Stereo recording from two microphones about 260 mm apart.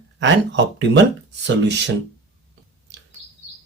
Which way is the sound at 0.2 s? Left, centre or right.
Right.